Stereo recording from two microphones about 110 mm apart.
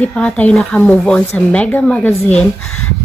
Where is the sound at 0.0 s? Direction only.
10° left (ahead or behind).